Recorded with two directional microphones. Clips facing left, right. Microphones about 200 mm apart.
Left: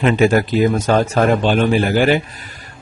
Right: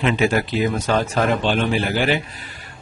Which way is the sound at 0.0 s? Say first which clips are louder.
Left 5 dB; 45° left (ahead or behind).